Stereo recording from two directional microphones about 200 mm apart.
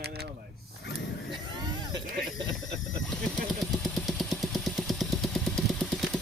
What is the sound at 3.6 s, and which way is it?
Vehicle, centre (ahead or behind).